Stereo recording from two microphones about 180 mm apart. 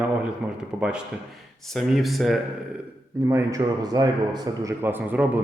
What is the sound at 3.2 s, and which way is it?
A man's voice, 20° right (ahead or behind).